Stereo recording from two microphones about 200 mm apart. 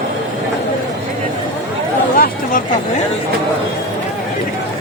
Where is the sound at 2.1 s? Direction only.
45° left (ahead or behind).